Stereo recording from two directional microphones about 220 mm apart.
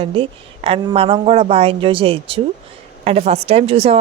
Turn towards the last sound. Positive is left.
turn(degrees=-25)  # may be behind; listen again after turning